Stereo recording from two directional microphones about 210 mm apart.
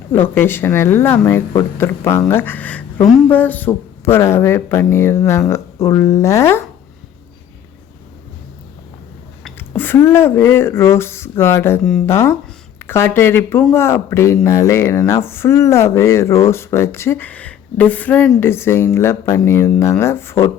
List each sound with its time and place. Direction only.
0.1 s speech: 10° left (ahead or behind)
9.4 s speech: 10° left (ahead or behind)